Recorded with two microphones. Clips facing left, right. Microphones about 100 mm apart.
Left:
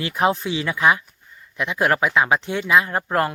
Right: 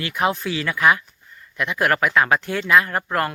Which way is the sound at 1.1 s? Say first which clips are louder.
Right 1 dB; 15° left (ahead or behind).